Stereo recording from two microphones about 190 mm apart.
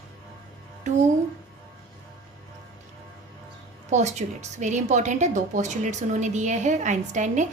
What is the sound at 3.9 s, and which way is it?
A woman's voice, 35° right (ahead or behind).